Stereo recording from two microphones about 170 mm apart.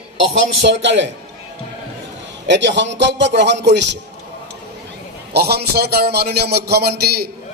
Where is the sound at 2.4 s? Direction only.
90° right.